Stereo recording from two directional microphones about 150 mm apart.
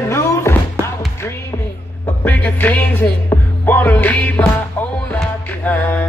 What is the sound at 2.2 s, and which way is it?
Music, 10° left (ahead or behind).